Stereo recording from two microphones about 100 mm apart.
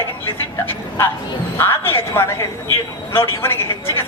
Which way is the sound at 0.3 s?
20° left (ahead or behind).